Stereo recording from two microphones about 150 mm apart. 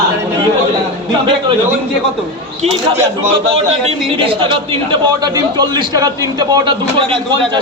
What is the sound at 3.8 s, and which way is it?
A man's voice, 35° right (ahead or behind).